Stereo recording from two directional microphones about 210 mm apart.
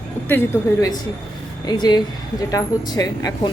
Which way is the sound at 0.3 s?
15° left (ahead or behind).